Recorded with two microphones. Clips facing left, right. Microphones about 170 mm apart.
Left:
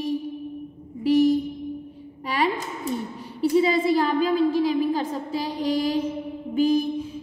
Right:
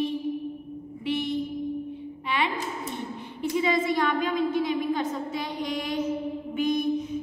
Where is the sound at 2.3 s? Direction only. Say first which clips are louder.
Left 4 dB; 40° left (ahead or behind).